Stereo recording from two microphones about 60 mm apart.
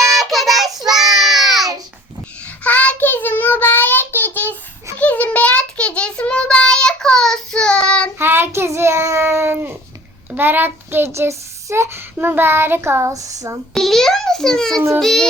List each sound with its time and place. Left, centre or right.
0.2 s child singing: centre
2.6 s child singing: left
8.2 s child singing: right
12.2 s a child's voice: right
13.7 s a child's voice: centre
14.9 s child singing: centre